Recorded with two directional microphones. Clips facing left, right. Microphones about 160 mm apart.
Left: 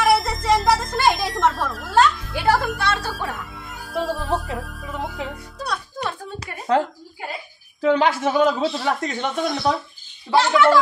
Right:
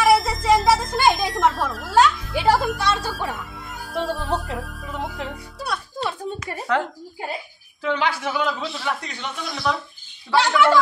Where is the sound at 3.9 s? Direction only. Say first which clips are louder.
Left 1 dB; centre (ahead or behind).